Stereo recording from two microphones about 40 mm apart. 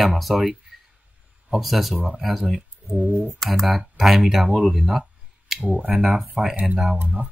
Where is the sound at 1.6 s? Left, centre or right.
Centre.